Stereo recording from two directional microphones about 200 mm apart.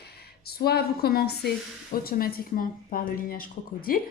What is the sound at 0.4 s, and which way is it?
Speech, 50° left (ahead or behind).